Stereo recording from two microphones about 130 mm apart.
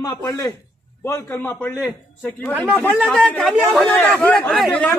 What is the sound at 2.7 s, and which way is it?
A man's voice, 10° left (ahead or behind).